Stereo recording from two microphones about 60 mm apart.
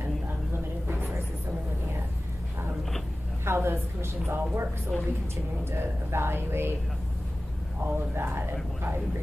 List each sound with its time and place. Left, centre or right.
3.4 s a woman's voice: right
4.9 s a woman's voice: centre
5.7 s a woman's voice: right
7.8 s a woman's voice: right